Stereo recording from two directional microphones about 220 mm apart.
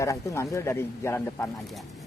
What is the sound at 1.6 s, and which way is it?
Speech, centre (ahead or behind).